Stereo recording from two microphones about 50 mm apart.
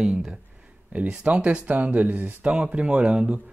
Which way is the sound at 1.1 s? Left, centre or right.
Right.